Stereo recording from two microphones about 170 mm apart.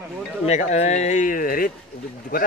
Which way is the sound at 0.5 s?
45° left (ahead or behind).